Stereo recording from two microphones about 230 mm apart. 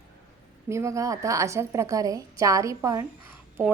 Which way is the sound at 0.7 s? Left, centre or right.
Centre.